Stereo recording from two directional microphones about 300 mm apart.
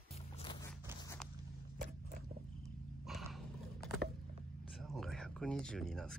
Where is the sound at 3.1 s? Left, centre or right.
Centre.